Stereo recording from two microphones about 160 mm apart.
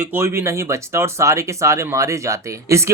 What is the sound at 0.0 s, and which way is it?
Speech, 15° right (ahead or behind).